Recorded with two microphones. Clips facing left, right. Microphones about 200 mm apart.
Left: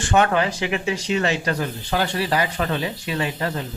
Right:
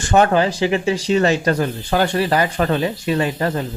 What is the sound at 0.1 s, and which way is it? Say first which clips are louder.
Speech: right 4 dB; 35° right (ahead or behind).